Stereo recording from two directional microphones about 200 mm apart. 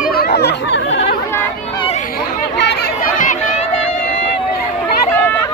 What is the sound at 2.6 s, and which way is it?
Chatter, 55° left (ahead or behind).